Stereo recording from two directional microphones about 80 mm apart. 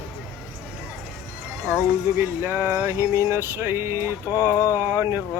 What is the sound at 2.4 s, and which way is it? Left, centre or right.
Speech, right.